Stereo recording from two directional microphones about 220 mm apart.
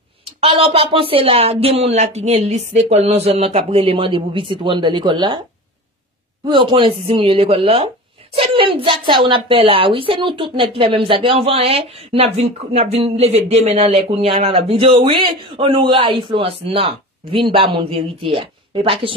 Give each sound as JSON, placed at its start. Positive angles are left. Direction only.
{"t": 0.4, "sound": "speech", "side_deg": -25}
{"t": 6.4, "sound": "speech", "side_deg": -20}